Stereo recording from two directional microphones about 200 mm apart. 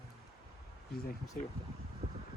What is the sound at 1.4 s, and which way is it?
Speech, 40° left (ahead or behind).